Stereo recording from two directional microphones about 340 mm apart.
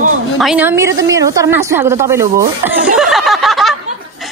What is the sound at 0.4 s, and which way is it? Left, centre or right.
A woman's voice, centre.